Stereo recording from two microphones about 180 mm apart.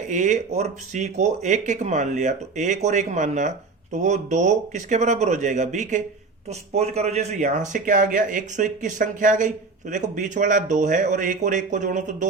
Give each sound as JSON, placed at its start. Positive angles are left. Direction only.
{"t": 0.1, "sound": "speech", "side_deg": -45}